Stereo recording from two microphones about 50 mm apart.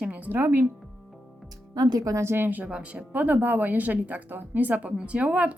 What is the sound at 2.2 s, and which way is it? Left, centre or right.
Speech, right.